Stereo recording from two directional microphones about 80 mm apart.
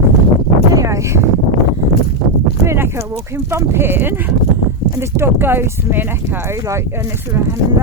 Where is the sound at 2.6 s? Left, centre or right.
Right.